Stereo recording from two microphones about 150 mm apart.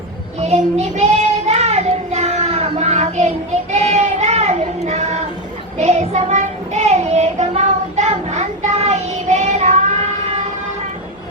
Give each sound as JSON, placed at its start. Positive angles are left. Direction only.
{"t": 0.3, "sound": "a child's voice", "side_deg": -45}
{"t": 1.5, "sound": "child singing", "side_deg": -45}